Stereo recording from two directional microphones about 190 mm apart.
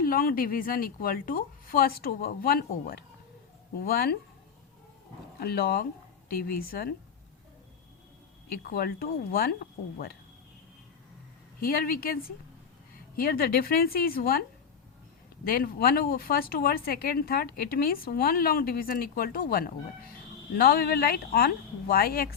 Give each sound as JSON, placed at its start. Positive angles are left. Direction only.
{"t": 0.0, "sound": "speech", "side_deg": 50}
{"t": 5.4, "sound": "speech", "side_deg": 55}
{"t": 8.6, "sound": "speech", "side_deg": 55}
{"t": 11.6, "sound": "speech", "side_deg": 50}
{"t": 15.4, "sound": "speech", "side_deg": 50}